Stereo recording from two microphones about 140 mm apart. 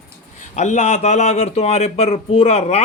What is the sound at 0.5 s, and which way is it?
Speech, 55° left (ahead or behind).